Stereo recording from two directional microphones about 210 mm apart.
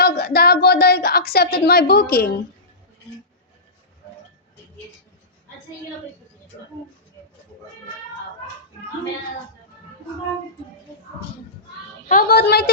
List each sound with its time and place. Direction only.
0.0 s a sound: 50° left (ahead or behind)
1.5 s a woman's voice: 50° left (ahead or behind)
12.0 s a woman's voice: 45° left (ahead or behind)